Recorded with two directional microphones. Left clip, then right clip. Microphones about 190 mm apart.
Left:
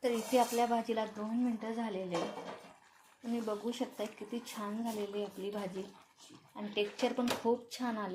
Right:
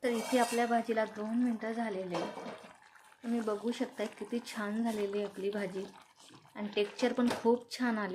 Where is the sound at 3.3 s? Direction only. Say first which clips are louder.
Right 3 dB; 25° right (ahead or behind).